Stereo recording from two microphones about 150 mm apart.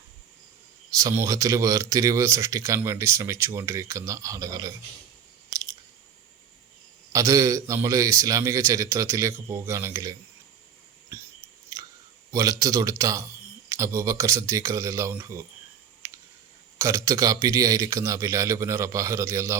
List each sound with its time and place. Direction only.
0.9 s speech: 25° right (ahead or behind)
5.5 s chewing: 25° right (ahead or behind)
7.1 s speech: 20° right (ahead or behind)
11.1 s a sound: 15° right (ahead or behind)
11.7 s chewing: 25° right (ahead or behind)
12.3 s speech: 20° right (ahead or behind)
16.0 s a sound: 20° right (ahead or behind)
16.7 s speech: 20° right (ahead or behind)